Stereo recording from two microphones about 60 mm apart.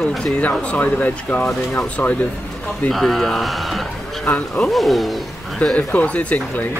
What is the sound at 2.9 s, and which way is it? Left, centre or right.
Speech, centre.